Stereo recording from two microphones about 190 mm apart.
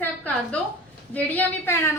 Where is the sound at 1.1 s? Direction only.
10° left (ahead or behind).